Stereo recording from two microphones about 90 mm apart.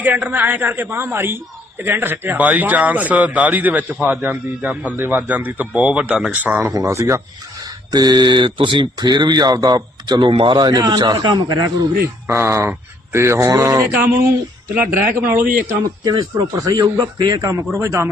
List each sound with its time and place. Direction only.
0.0 s a man's voice: 20° right (ahead or behind)
6.6 s speech: 30° right (ahead or behind)
7.6 s speech: 50° right (ahead or behind); by 8.9 s 65° right (ahead or behind)
9.0 s a man's voice: 50° right (ahead or behind)
12.3 s a man's voice: 30° right (ahead or behind)
16.0 s a man's voice: 45° right (ahead or behind)
17.2 s a man's voice: 55° right (ahead or behind)
17.7 s speech: 35° right (ahead or behind)